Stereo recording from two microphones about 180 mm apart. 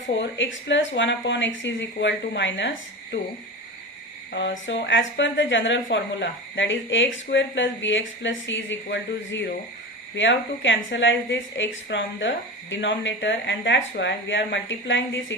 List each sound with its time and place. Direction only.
0.0 s speech: 90° left
4.3 s speech: 80° left